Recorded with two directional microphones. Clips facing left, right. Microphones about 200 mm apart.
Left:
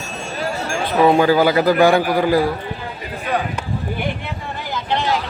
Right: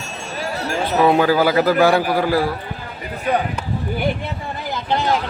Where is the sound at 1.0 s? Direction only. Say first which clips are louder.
Left 2 dB; 5° right (ahead or behind).